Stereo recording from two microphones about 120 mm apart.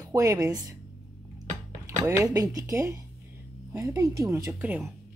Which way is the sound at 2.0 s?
25° right (ahead or behind).